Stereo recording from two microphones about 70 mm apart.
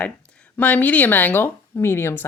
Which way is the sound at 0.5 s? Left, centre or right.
Left.